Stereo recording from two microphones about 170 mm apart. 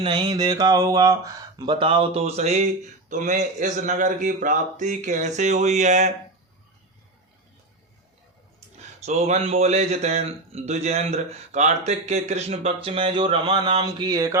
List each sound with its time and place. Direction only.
0.0 s a sound: 30° right (ahead or behind)
0.6 s a man's voice: 20° right (ahead or behind); by 6.1 s 45° right (ahead or behind)
9.0 s a man's voice: 40° right (ahead or behind); by 14.3 s 20° right (ahead or behind)